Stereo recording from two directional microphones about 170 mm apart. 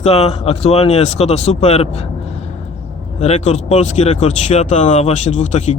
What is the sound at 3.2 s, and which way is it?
Speech, 40° left (ahead or behind).